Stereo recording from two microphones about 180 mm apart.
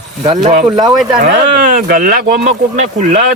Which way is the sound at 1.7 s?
55° right (ahead or behind).